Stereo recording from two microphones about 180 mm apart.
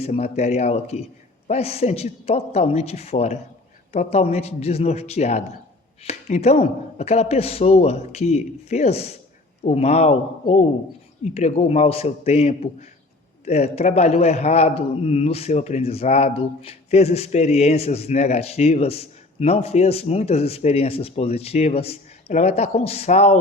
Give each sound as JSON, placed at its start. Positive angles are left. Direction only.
{"t": 0.0, "sound": "a man's voice", "side_deg": 35}
{"t": 11.3, "sound": "a man's voice", "side_deg": 40}